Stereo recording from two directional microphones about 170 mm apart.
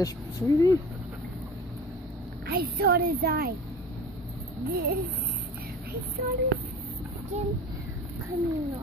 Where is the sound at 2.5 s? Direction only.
65° right (ahead or behind).